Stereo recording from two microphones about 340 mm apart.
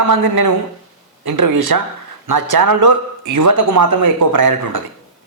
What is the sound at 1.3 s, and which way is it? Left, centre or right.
Speech, right.